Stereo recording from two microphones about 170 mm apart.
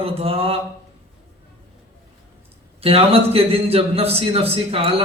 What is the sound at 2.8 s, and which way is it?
A man's voice, 35° right (ahead or behind).